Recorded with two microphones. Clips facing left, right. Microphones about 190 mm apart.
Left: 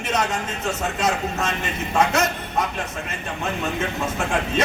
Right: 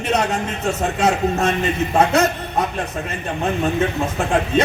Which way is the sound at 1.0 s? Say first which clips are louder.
Right 7 dB; 30° right (ahead or behind).